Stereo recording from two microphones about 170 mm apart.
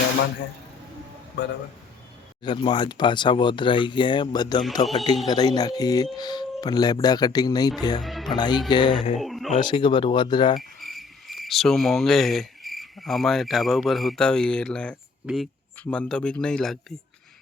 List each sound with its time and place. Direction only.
2.4 s speech: 25° left (ahead or behind)
8.0 s speech: centre (ahead or behind)
8.4 s speech: 25° left (ahead or behind)
9.2 s a sound: centre (ahead or behind)
9.5 s speech: 30° left (ahead or behind)
10.6 s cricket: centre (ahead or behind)